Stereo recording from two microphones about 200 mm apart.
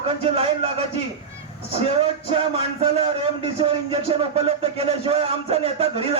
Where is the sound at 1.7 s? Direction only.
30° right (ahead or behind).